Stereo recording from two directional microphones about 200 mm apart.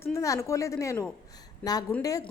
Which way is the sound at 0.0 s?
15° left (ahead or behind).